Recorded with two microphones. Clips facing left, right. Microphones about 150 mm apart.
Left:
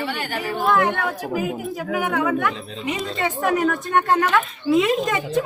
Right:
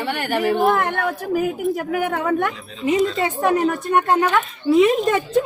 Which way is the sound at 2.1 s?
50° right (ahead or behind).